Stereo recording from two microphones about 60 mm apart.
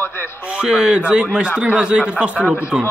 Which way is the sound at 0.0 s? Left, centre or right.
Left.